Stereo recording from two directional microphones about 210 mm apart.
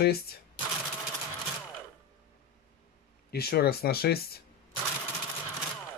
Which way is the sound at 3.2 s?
50° left (ahead or behind).